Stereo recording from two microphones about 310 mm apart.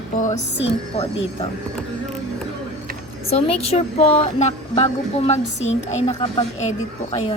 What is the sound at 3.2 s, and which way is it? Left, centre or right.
A woman's voice, centre.